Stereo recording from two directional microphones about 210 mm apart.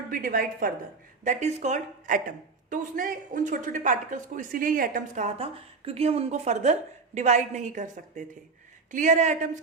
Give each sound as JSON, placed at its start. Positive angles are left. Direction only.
{"t": 0.1, "sound": "a woman's voice", "side_deg": -40}